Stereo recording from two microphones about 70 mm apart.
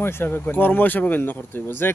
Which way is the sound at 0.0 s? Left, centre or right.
Left.